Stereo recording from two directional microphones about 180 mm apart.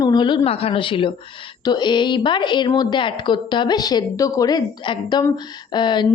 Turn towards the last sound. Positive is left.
turn(degrees=25)  # may be behind; listen again after turning